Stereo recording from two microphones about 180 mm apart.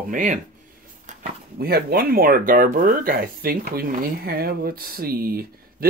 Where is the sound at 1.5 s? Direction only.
60° right (ahead or behind).